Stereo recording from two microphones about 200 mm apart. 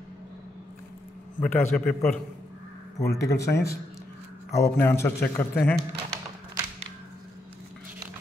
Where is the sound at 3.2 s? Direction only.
15° left (ahead or behind).